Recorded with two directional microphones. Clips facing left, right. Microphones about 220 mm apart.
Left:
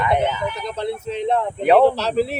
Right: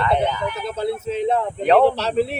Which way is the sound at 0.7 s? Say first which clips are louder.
Right 2 dB; 5° right (ahead or behind).